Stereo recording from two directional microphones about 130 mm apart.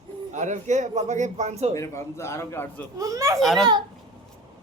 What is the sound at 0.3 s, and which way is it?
A man's voice, 70° right (ahead or behind).